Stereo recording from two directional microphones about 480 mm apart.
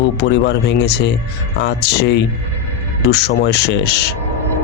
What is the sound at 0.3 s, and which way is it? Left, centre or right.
A man's voice, left.